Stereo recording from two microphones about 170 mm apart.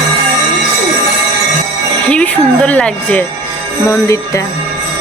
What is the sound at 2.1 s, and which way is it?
Music, 5° left (ahead or behind).